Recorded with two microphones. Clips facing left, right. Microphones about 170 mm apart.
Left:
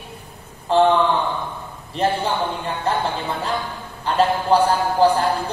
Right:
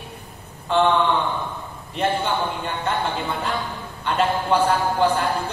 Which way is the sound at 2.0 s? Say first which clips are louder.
Left 2 dB; 35° left (ahead or behind).